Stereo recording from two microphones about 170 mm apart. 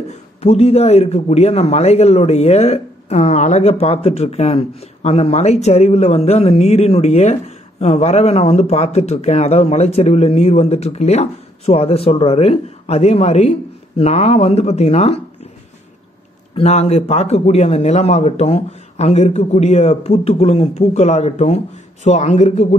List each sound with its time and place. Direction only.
0.4 s a man's voice: 40° left (ahead or behind)
16.5 s a man's voice: 40° left (ahead or behind)